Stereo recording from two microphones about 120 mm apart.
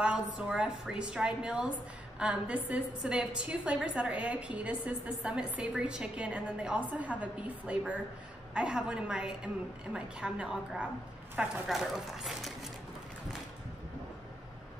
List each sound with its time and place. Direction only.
0.0 s a woman's voice: 10° right (ahead or behind)